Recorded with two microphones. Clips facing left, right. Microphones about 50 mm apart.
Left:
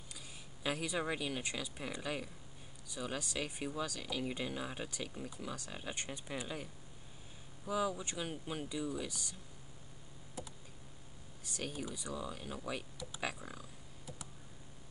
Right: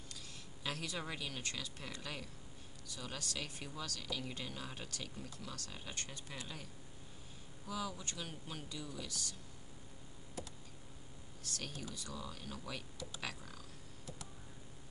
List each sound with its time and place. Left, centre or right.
0.7 s speech: centre
11.4 s speech: centre